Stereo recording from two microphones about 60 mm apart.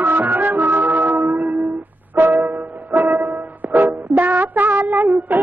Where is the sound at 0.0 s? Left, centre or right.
Right.